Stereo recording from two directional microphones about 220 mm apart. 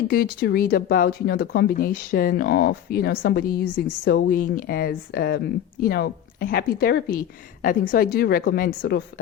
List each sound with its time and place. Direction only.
0.1 s a woman's voice: 45° left (ahead or behind)